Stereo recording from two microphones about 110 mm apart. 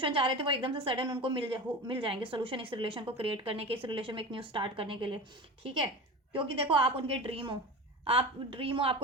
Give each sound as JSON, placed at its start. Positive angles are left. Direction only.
{"t": 0.0, "sound": "a woman's voice", "side_deg": -55}
{"t": 3.8, "sound": "a woman's voice", "side_deg": -50}
{"t": 6.3, "sound": "a woman's voice", "side_deg": -50}